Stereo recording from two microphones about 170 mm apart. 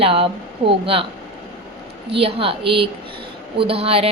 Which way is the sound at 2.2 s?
35° right (ahead or behind).